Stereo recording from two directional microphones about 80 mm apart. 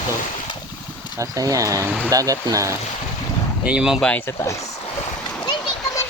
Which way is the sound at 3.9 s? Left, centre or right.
Centre.